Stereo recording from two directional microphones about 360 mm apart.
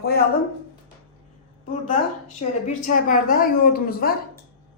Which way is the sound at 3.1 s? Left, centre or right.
Left.